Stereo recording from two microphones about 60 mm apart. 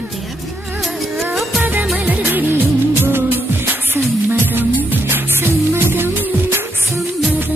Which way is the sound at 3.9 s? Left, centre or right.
Right.